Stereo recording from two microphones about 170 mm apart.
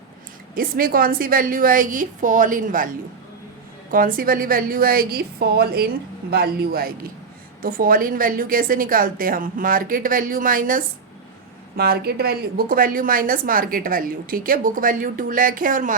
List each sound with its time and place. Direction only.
0.5 s a woman's voice: 60° right (ahead or behind)
3.9 s a woman's voice: 55° right (ahead or behind)
11.8 s a woman's voice: 65° right (ahead or behind)